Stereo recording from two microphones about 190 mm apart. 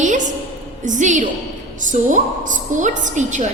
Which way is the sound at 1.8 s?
40° right (ahead or behind).